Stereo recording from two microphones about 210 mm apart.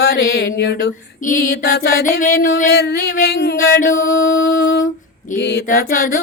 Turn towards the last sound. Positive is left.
turn(degrees=40)  # may be behind; listen again after turning